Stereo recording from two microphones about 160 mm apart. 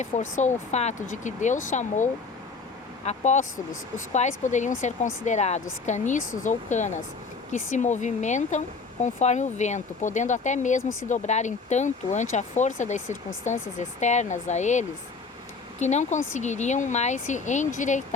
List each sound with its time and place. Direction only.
0.0 s speech: 50° left (ahead or behind)